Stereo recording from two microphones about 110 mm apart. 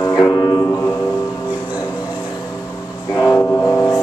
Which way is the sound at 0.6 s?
20° left (ahead or behind).